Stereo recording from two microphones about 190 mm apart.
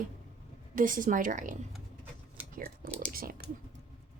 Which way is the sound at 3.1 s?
50° right (ahead or behind).